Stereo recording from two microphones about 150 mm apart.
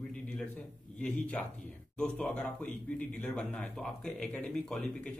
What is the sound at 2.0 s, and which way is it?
A man's voice, 5° left (ahead or behind).